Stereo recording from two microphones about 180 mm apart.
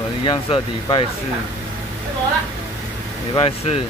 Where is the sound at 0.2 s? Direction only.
25° left (ahead or behind).